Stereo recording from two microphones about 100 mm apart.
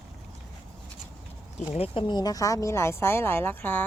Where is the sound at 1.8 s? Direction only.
70° left (ahead or behind).